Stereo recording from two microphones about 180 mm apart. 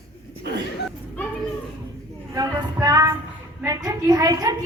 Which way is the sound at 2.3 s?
20° right (ahead or behind).